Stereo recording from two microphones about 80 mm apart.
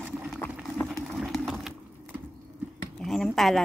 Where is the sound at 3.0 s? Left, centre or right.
Centre.